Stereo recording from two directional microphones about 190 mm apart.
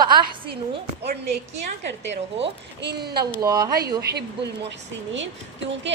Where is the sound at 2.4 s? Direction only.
60° right (ahead or behind).